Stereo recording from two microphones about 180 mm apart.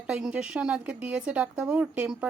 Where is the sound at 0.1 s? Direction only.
5° right (ahead or behind).